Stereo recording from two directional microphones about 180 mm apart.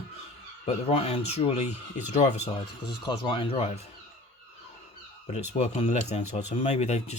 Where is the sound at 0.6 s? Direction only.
35° left (ahead or behind).